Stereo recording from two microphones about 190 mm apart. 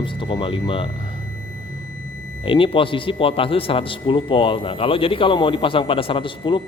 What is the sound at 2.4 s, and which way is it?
A man's voice, 25° left (ahead or behind).